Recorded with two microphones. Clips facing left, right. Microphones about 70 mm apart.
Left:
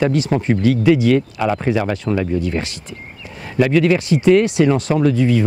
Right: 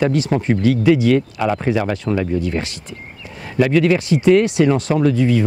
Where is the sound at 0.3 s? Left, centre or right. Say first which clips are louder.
Even; left.